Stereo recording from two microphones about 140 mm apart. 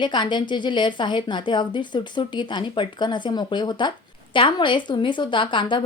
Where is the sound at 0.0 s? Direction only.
35° left (ahead or behind).